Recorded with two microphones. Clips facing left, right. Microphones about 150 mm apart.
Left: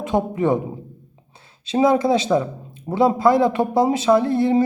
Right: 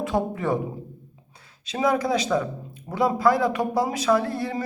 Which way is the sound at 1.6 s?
25° left (ahead or behind).